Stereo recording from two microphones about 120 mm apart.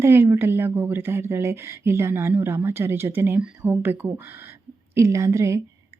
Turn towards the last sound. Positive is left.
turn(degrees=-25)  # may be behind; listen again after turning